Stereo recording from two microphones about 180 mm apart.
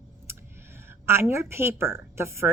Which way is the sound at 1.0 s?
15° right (ahead or behind).